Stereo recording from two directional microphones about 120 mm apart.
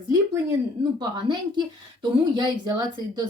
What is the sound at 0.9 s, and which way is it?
A woman's voice, 35° right (ahead or behind).